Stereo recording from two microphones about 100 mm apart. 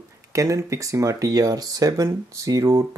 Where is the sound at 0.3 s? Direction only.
30° right (ahead or behind).